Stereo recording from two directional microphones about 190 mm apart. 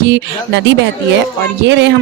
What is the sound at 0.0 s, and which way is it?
Speech, 65° right (ahead or behind).